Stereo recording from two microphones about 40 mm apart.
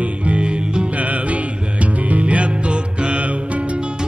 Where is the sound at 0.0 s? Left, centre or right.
Right.